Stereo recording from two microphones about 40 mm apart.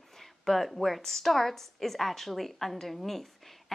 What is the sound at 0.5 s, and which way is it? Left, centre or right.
A woman's voice, centre.